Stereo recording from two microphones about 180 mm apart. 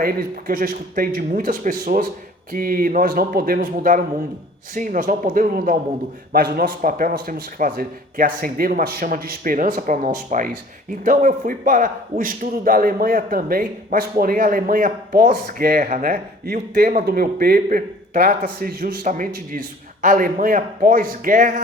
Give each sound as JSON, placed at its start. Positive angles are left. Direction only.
{"t": 0.0, "sound": "a man's voice", "side_deg": -55}